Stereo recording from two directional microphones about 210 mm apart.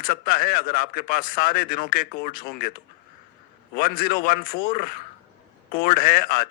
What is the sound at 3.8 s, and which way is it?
Speech, 45° left (ahead or behind).